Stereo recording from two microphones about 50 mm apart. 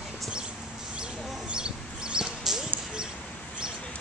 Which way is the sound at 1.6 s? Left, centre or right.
Centre.